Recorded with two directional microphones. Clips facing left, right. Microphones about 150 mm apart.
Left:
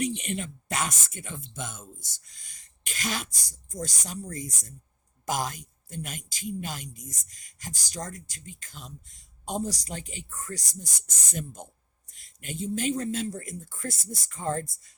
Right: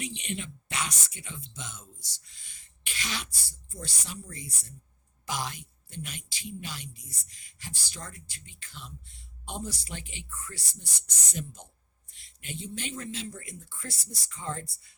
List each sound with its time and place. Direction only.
0.0 s speech: 45° left (ahead or behind)